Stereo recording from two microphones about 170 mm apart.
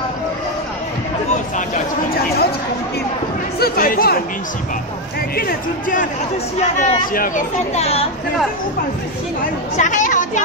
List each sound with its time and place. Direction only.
3.5 s speech: 60° left (ahead or behind)
5.3 s speech: 55° left (ahead or behind); by 8.1 s 35° left (ahead or behind)
9.8 s chatter: 50° left (ahead or behind)